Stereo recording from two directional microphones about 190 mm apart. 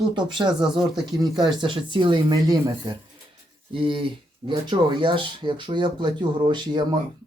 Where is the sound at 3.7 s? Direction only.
30° right (ahead or behind).